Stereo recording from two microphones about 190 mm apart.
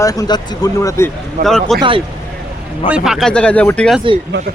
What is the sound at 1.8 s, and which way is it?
Speech, 25° right (ahead or behind).